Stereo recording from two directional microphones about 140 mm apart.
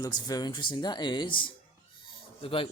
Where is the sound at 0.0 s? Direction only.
30° left (ahead or behind).